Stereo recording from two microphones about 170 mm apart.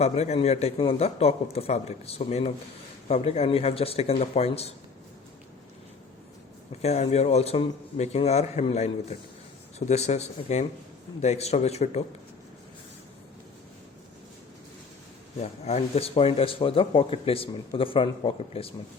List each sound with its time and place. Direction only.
0.0 s speech: 40° left (ahead or behind)
6.8 s speech: 40° left (ahead or behind)
15.4 s speech: 40° left (ahead or behind)